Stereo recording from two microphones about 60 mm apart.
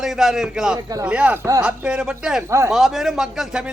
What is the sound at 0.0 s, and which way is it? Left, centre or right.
Speech, centre.